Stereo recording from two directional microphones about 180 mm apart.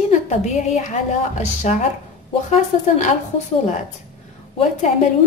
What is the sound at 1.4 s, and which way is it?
A woman's voice, 40° left (ahead or behind).